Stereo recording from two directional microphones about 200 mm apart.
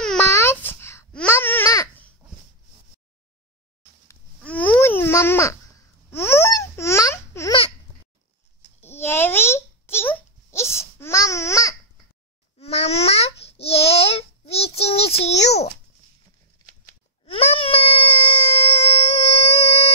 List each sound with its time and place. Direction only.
0.0 s babbling: 10° left (ahead or behind)
4.1 s babbling: 5° left (ahead or behind)
8.8 s babbling: 10° left (ahead or behind)
12.5 s babbling: 30° left (ahead or behind)
15.1 s a sound: 35° left (ahead or behind)
17.3 s a sound: 30° left (ahead or behind)